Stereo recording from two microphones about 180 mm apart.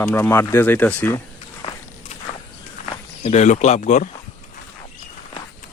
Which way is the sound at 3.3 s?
40° left (ahead or behind).